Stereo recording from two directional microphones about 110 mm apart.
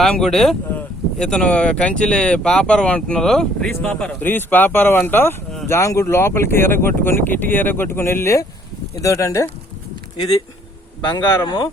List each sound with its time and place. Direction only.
0.0 s speech: 5° left (ahead or behind); by 9.5 s 30° left (ahead or behind)
11.4 s speech: 45° left (ahead or behind)